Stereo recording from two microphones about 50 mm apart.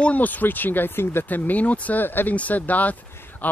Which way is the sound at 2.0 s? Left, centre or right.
Left.